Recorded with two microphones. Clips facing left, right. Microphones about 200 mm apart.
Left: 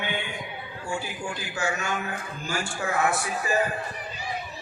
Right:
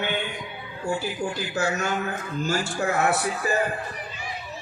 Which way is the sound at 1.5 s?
40° right (ahead or behind).